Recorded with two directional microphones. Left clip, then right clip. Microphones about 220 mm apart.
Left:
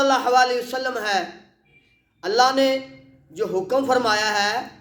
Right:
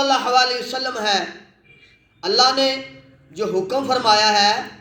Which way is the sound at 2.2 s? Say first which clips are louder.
Right 1 dB; 20° left (ahead or behind).